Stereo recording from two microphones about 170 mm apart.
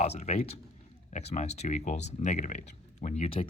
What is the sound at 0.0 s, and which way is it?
Speech, 40° left (ahead or behind).